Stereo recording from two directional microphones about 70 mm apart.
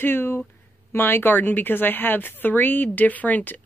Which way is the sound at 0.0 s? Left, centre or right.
Left.